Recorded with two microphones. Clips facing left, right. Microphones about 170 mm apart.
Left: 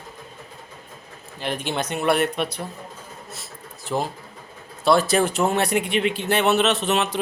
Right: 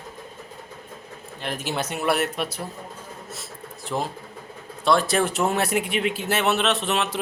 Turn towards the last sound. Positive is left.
turn(degrees=0)  # may be behind; listen again after turning